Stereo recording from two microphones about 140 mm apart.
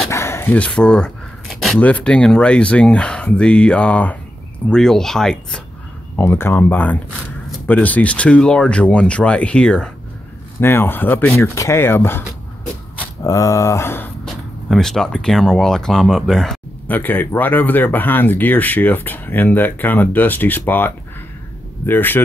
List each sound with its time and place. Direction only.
0.1 s dog: 20° left (ahead or behind); by 1.8 s centre (ahead or behind)
1.8 s speech: 10° left (ahead or behind)
6.1 s speech: 15° left (ahead or behind)
14.2 s speech: 5° left (ahead or behind)